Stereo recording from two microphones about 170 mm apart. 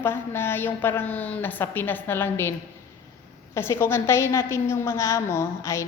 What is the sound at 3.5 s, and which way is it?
A woman's voice, 15° left (ahead or behind).